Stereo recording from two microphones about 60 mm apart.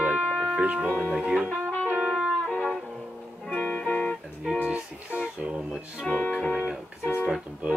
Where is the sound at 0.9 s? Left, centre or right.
Centre.